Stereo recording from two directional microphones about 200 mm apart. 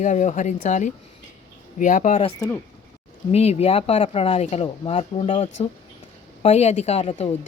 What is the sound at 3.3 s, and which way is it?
Speech, 30° left (ahead or behind).